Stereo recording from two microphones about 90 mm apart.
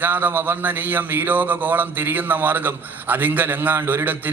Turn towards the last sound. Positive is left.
turn(degrees=-20)  # may be behind; listen again after turning